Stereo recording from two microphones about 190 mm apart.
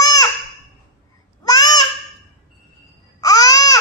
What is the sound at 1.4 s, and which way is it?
Babbling, 20° left (ahead or behind).